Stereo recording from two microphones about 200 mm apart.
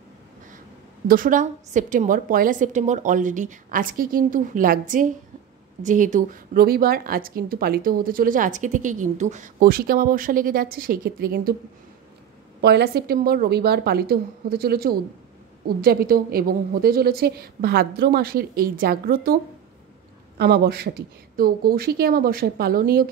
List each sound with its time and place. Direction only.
1.0 s a woman's voice: 45° right (ahead or behind)
12.6 s a woman's voice: 55° right (ahead or behind)
20.3 s a woman's voice: 50° right (ahead or behind)